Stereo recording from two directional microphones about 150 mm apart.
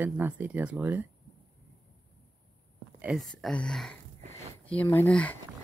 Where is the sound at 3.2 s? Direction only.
5° left (ahead or behind).